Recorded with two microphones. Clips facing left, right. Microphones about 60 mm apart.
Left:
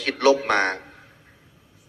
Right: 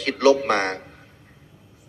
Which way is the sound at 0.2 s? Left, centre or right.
Left.